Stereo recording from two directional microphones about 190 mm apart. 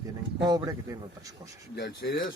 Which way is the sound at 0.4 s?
20° right (ahead or behind).